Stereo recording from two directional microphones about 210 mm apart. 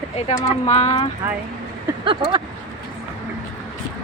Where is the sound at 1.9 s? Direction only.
20° right (ahead or behind).